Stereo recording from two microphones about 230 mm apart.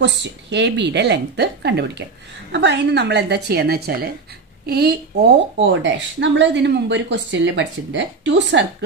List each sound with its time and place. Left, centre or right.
0.0 s a woman's voice: right